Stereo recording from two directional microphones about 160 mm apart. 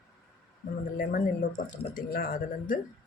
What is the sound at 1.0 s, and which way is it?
Speech, 60° left (ahead or behind).